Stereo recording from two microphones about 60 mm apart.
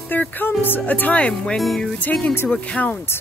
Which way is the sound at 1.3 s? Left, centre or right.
Centre.